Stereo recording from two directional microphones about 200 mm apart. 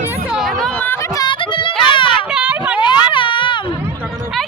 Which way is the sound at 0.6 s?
5° left (ahead or behind).